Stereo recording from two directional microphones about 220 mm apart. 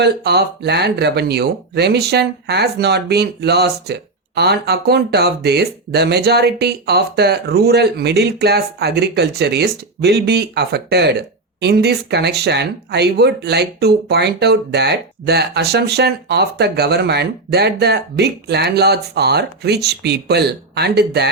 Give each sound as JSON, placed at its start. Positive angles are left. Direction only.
{"t": 0.0, "sound": "speech", "side_deg": -50}